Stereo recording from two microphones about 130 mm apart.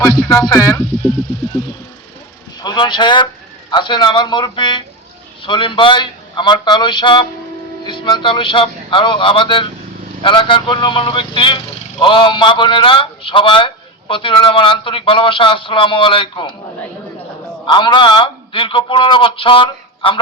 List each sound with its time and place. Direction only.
0.0 s speech: 30° left (ahead or behind)
2.6 s speech: 35° left (ahead or behind)
17.7 s speech: 35° left (ahead or behind)